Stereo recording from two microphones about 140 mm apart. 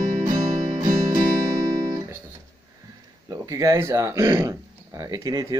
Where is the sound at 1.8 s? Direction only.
25° right (ahead or behind).